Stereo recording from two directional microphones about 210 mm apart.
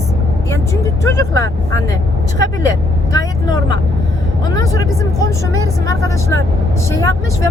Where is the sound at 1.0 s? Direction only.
15° left (ahead or behind).